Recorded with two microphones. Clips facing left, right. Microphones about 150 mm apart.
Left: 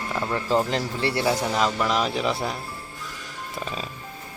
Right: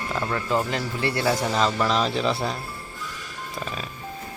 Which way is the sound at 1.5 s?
10° left (ahead or behind).